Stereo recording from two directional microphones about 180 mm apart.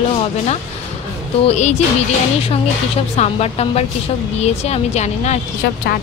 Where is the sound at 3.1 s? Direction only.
35° left (ahead or behind).